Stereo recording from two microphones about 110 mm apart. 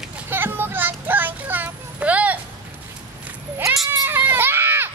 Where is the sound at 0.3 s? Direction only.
20° right (ahead or behind).